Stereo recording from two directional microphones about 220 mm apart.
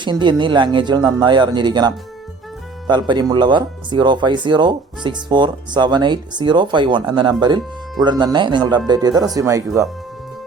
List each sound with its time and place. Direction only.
0.0 s speech: 20° right (ahead or behind)